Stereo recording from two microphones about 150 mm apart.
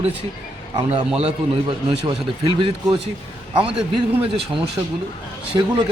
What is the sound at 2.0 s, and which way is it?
A man's voice, 35° right (ahead or behind).